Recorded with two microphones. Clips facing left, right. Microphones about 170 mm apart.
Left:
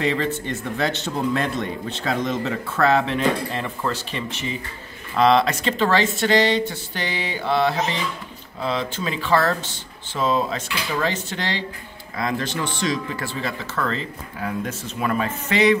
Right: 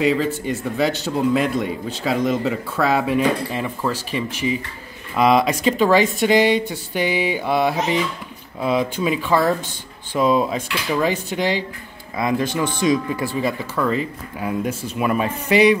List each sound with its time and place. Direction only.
0.0 s a man's voice: 5° right (ahead or behind)